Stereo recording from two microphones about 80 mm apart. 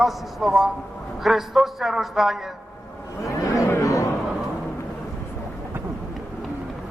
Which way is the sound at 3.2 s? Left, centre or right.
Left.